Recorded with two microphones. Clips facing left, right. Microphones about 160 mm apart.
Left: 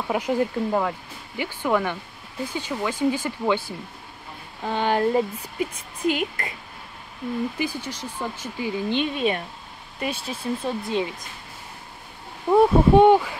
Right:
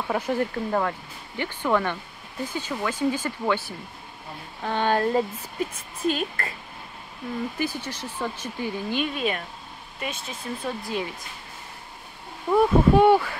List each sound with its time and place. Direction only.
0.0 s speech: 15° left (ahead or behind)
7.5 s speech: 15° left (ahead or behind)
8.9 s speech: 25° left (ahead or behind)
12.4 s speech: 25° left (ahead or behind)